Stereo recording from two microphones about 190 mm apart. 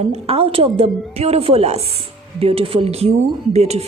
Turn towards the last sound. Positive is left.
turn(degrees=-35)  # may be behind; listen again after turning